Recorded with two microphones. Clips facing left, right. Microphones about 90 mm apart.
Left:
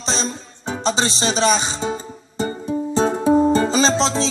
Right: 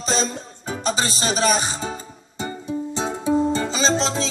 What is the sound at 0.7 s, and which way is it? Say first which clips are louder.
Music: left 3 dB; 30° left (ahead or behind).